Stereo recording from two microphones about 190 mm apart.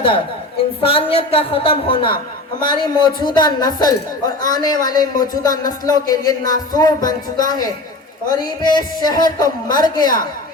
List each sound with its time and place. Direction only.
0.8 s speech: 30° left (ahead or behind)